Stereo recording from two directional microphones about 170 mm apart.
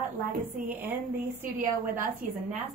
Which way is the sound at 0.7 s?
10° right (ahead or behind).